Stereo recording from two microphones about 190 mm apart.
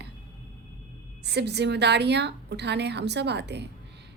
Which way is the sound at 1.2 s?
60° right (ahead or behind).